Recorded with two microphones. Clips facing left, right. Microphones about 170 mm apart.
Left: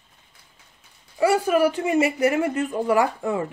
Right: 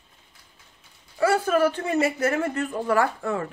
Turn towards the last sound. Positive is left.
turn(degrees=15)  # may be behind; listen again after turning